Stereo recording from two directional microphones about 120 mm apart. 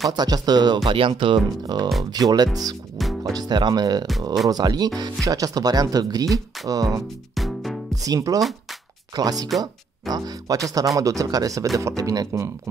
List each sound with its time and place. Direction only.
0.1 s speech: 35° right (ahead or behind)
0.8 s speech: 45° right (ahead or behind)
3.0 s music: centre (ahead or behind)
3.3 s speech: 40° right (ahead or behind)
6.2 s speech: centre (ahead or behind)
6.7 s speech: 30° right (ahead or behind)
7.3 s music: centre (ahead or behind)
7.9 s speech: 30° right (ahead or behind)